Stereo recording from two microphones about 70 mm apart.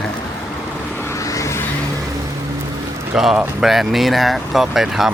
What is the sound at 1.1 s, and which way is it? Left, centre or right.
Vehicle, left.